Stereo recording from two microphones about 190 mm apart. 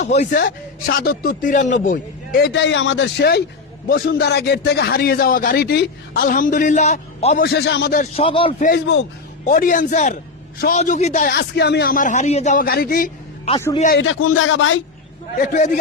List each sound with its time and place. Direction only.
0.0 s speech: 40° left (ahead or behind)
0.3 s a man's voice: 55° left (ahead or behind); by 7.4 s 40° left (ahead or behind)
7.4 s a man's voice: 60° left (ahead or behind)
8.1 s a man's voice: 30° left (ahead or behind)
8.5 s a man's voice: 45° left (ahead or behind)
11.3 s a man's voice: 60° left (ahead or behind)
14.0 s speech: 90° left
15.4 s a man's voice: 40° left (ahead or behind)